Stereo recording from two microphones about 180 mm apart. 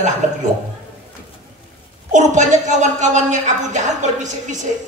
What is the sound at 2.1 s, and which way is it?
A woman's voice, 40° right (ahead or behind).